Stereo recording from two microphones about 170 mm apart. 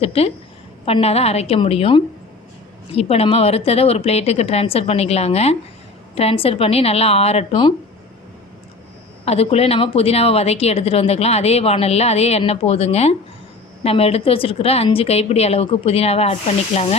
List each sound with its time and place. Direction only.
0.0 s a woman's voice: 35° left (ahead or behind)
9.2 s a woman's voice: 35° left (ahead or behind)